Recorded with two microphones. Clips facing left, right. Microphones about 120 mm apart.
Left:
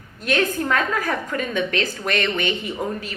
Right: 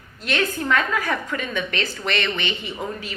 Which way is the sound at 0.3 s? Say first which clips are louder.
Left 2 dB; 45° left (ahead or behind).